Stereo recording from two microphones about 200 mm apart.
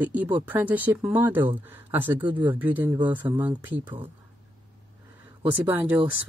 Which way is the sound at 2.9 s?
25° right (ahead or behind).